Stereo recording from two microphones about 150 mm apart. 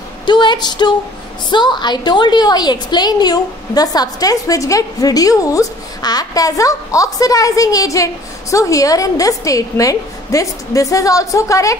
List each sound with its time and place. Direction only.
0.3 s a woman's voice: 30° left (ahead or behind)